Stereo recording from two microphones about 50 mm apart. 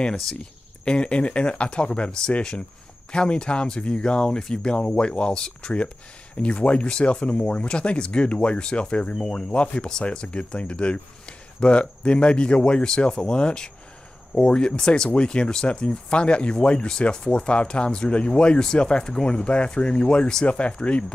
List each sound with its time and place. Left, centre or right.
0.0 s speech: centre